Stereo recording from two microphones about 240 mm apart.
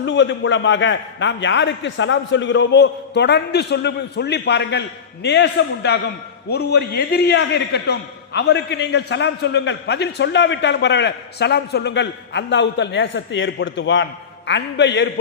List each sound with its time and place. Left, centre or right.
0.0 s a man's voice: left